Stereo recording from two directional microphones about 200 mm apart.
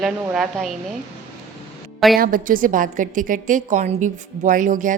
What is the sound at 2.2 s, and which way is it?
A woman's voice, 45° right (ahead or behind).